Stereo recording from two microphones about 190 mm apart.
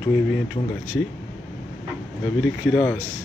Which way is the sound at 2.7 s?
5° left (ahead or behind).